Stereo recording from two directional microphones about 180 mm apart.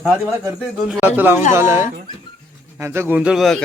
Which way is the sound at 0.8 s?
Centre (ahead or behind).